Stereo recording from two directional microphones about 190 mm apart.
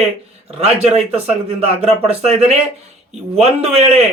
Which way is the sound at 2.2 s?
35° right (ahead or behind).